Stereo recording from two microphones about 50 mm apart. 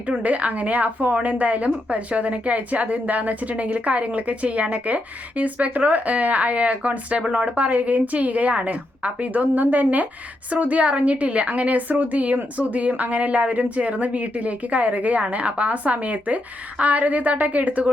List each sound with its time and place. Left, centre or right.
0.2 s a woman's voice: right